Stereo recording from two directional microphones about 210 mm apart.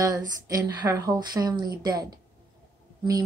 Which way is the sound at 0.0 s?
15° right (ahead or behind).